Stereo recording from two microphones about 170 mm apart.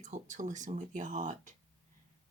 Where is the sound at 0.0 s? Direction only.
45° right (ahead or behind).